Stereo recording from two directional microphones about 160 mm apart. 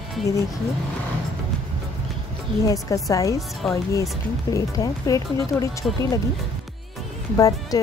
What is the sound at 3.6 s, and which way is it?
Speech, centre (ahead or behind).